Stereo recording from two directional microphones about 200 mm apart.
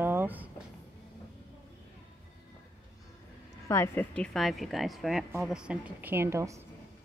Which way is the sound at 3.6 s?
10° left (ahead or behind).